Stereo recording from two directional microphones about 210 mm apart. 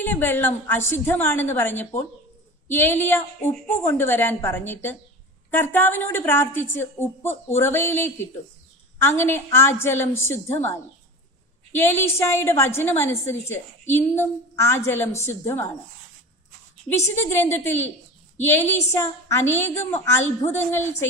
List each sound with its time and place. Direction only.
0.0 s a woman's voice: 10° left (ahead or behind)
11.7 s a woman's voice: 10° left (ahead or behind)
17.2 s a woman's voice: 10° left (ahead or behind)
19.8 s a woman's voice: 35° left (ahead or behind)
20.6 s a woman's voice: 10° left (ahead or behind)